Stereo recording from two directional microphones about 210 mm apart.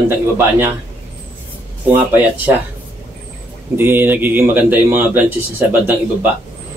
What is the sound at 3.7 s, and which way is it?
A man's voice, 10° right (ahead or behind).